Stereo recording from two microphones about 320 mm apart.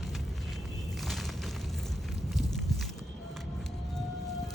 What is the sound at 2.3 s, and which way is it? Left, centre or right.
Walk, centre.